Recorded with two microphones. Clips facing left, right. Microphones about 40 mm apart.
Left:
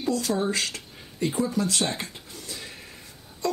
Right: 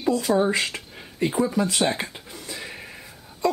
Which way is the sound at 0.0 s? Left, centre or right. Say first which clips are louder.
Right 5 dB; centre.